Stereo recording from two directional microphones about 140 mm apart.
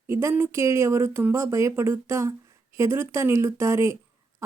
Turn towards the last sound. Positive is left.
turn(degrees=-20)  # may be behind; listen again after turning